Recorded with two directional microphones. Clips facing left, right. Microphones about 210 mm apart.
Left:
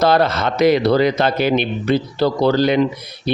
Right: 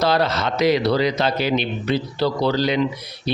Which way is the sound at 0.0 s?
55° left (ahead or behind).